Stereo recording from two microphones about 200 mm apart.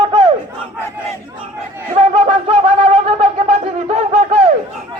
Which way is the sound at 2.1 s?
25° right (ahead or behind).